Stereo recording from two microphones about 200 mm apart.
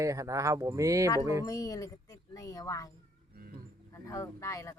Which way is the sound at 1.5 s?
15° left (ahead or behind).